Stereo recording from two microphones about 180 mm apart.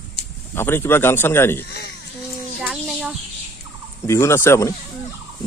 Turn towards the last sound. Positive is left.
turn(degrees=15)  # may be behind; listen again after turning